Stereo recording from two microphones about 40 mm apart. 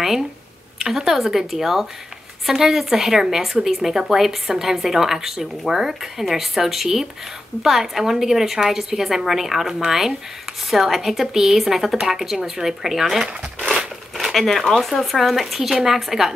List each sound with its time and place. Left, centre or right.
0.7 s a woman's voice: centre
13.2 s speech: right
13.7 s speech: centre